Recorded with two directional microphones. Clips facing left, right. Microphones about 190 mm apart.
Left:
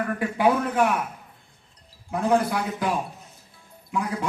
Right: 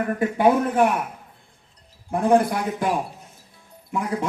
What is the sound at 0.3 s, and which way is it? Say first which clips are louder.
Speech: right 3 dB; 25° right (ahead or behind).